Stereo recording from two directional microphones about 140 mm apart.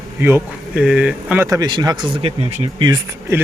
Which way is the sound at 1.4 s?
25° right (ahead or behind).